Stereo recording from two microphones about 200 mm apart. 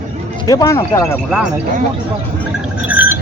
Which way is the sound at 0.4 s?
15° left (ahead or behind).